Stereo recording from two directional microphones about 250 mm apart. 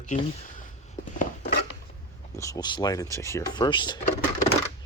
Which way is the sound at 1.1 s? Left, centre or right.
Left.